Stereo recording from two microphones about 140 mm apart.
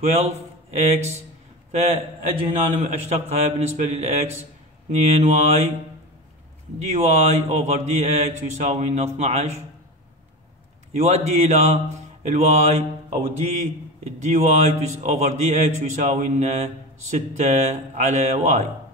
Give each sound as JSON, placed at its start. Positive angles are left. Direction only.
{"t": 0.0, "sound": "a man's voice", "side_deg": -50}
{"t": 6.9, "sound": "a man's voice", "side_deg": -50}
{"t": 11.0, "sound": "a man's voice", "side_deg": -50}